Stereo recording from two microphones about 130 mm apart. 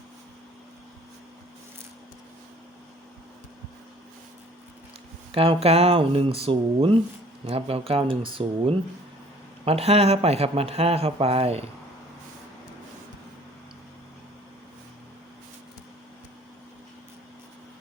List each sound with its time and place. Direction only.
5.3 s speech: 45° right (ahead or behind)